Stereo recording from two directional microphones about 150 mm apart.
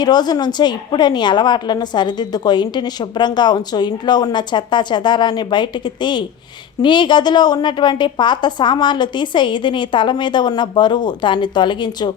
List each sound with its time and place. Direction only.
0.0 s a woman's voice: 25° left (ahead or behind)